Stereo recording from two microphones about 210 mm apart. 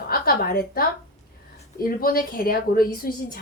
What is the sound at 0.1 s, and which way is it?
A woman's voice, 45° left (ahead or behind).